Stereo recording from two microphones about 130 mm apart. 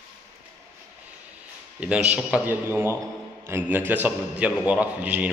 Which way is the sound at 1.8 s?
10° right (ahead or behind).